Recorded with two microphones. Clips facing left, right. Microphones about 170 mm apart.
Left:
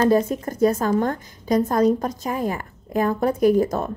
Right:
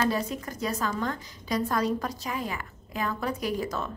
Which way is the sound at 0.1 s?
50° left (ahead or behind).